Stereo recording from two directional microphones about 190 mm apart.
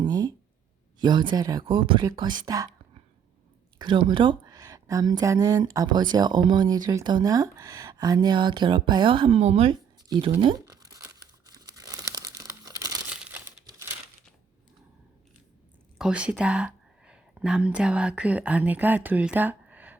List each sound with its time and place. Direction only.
0.0 s a sound: 20° right (ahead or behind)
0.9 s a woman's voice: 25° right (ahead or behind)
3.8 s a woman's voice: 25° right (ahead or behind)
10.4 s crumpling: 20° right (ahead or behind)
16.0 s speech: 5° right (ahead or behind)